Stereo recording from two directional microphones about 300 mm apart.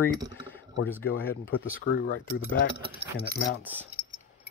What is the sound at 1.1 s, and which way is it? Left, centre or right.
Speech, left.